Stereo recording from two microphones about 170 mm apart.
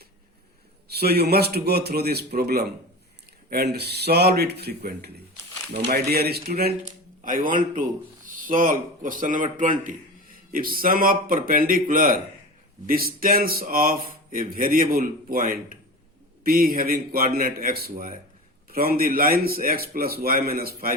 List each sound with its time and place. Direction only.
0.9 s a man's voice: 70° right (ahead or behind)
7.2 s speech: 55° right (ahead or behind)